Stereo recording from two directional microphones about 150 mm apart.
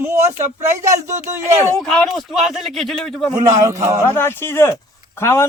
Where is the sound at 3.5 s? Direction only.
20° right (ahead or behind).